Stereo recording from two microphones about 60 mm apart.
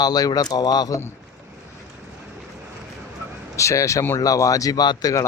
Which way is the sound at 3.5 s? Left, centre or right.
Left.